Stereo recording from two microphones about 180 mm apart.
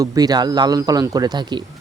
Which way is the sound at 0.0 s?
20° right (ahead or behind).